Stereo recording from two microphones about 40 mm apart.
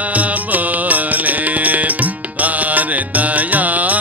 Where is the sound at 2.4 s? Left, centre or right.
Right.